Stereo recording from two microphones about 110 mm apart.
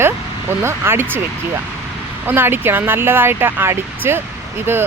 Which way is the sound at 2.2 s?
20° right (ahead or behind).